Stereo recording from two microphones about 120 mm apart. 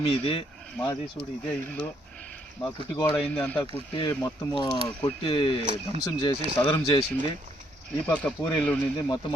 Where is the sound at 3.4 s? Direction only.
15° left (ahead or behind).